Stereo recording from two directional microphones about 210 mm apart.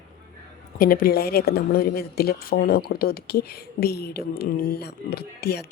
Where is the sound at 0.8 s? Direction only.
45° left (ahead or behind).